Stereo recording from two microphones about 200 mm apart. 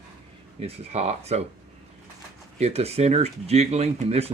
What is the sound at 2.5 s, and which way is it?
Speech, 30° right (ahead or behind).